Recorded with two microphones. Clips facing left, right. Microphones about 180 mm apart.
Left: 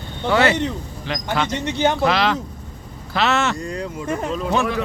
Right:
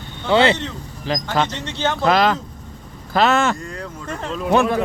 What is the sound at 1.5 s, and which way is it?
Speech, 15° left (ahead or behind).